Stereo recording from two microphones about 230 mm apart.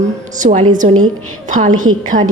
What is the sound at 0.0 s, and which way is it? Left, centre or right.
A woman's voice, right.